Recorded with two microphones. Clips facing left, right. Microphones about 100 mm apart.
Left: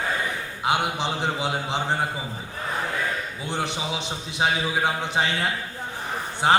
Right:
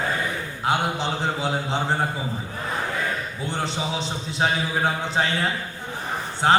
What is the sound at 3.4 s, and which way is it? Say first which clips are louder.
A man's voice: right 1 dB; 15° left (ahead or behind).